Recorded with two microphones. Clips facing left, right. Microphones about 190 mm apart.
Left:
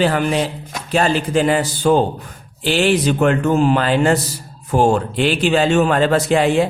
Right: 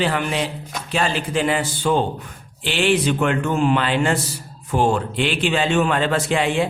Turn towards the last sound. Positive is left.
turn(degrees=40)  # may be behind; listen again after turning